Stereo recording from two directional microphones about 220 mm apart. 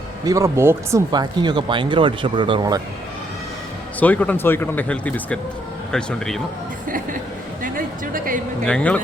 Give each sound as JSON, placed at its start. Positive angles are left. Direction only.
{"t": 0.3, "sound": "speech", "side_deg": -15}
{"t": 4.0, "sound": "speech", "side_deg": 5}
{"t": 6.8, "sound": "a sound", "side_deg": -35}
{"t": 7.6, "sound": "music", "side_deg": -40}
{"t": 8.6, "sound": "speech", "side_deg": 5}